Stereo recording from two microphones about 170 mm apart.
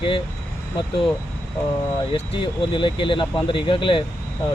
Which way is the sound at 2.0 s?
30° left (ahead or behind).